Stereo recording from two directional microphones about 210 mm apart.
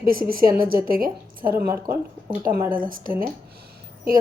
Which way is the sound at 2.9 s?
40° right (ahead or behind).